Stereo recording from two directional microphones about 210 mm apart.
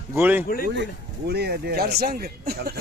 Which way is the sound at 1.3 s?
50° right (ahead or behind).